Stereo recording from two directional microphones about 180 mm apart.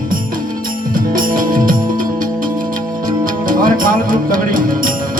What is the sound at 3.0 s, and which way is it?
Music, 50° right (ahead or behind).